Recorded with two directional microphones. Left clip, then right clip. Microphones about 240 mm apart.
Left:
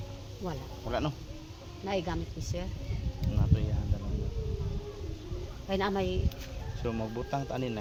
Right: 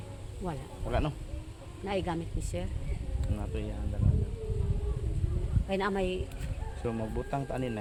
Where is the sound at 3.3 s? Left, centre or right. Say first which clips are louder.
Left 2 dB; centre.